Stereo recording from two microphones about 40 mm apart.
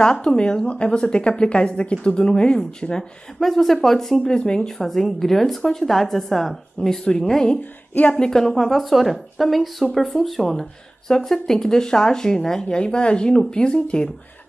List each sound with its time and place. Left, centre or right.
0.0 s speech: centre
3.3 s speech: centre
4.3 s speech: centre
4.8 s a woman's voice: centre
8.6 s a woman's voice: centre; by 14.1 s left